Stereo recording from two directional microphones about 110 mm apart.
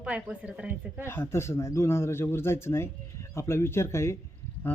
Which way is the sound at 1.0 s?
20° left (ahead or behind).